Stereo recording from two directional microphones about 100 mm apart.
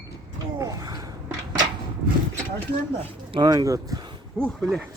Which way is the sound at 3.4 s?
35° right (ahead or behind).